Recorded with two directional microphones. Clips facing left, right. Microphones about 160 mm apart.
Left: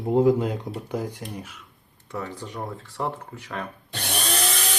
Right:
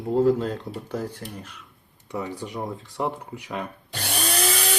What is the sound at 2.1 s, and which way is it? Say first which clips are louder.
Speech: right 2 dB; 15° right (ahead or behind).